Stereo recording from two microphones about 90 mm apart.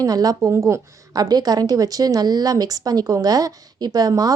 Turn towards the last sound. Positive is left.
turn(degrees=-45)  # may be behind; listen again after turning